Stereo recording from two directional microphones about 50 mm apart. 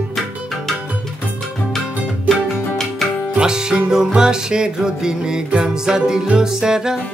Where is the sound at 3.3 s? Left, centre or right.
Centre.